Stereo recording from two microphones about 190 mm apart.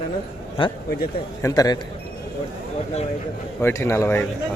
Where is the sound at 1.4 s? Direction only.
20° left (ahead or behind).